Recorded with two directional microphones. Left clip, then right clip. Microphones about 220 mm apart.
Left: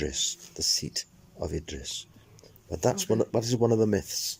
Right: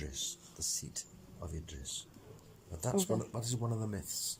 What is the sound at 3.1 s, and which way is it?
Speech, 40° left (ahead or behind).